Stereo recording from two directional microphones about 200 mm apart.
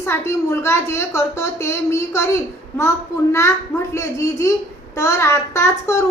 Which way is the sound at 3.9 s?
15° left (ahead or behind).